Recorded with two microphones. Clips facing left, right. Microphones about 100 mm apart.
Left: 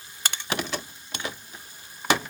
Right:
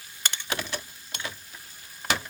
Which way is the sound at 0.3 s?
20° left (ahead or behind).